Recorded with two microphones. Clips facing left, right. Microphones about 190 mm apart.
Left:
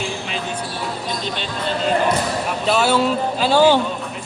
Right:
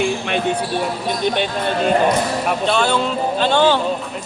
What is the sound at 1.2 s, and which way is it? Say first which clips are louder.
Speech: right 6 dB; 60° right (ahead or behind).